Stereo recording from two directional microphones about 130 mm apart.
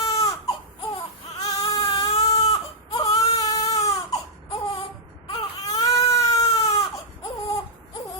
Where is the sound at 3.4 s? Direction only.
25° left (ahead or behind).